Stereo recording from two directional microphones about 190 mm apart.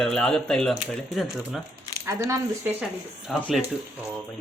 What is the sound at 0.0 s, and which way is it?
Speech, centre (ahead or behind).